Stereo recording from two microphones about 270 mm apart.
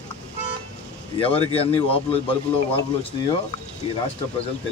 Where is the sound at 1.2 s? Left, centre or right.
Left.